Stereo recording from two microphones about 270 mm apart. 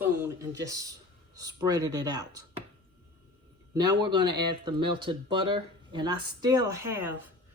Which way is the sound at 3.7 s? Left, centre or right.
Centre.